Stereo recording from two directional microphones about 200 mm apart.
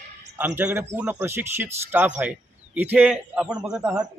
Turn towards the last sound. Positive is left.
turn(degrees=-5)  # may be behind; listen again after turning